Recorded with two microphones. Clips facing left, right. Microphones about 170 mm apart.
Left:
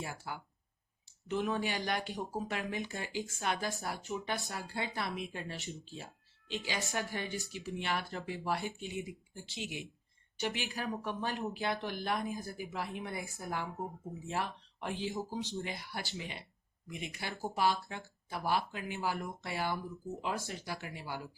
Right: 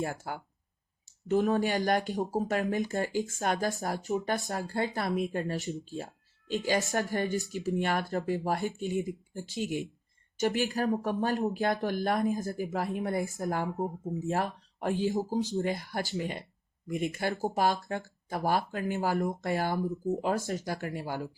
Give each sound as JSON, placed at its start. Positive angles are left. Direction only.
{"t": 0.0, "sound": "speech", "side_deg": -50}